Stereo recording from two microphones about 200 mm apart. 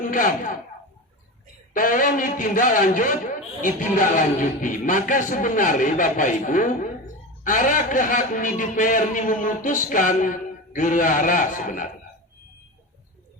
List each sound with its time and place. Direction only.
0.0 s speech: 40° left (ahead or behind)
1.7 s a man's voice: 40° left (ahead or behind)